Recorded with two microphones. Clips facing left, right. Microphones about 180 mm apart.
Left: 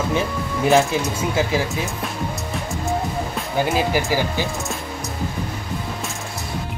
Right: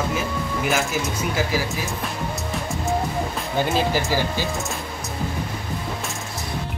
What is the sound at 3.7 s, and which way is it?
Speech, 15° left (ahead or behind).